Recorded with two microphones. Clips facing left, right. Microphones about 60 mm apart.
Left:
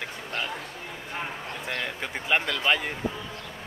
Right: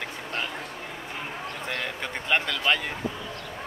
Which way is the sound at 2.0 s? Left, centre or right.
Centre.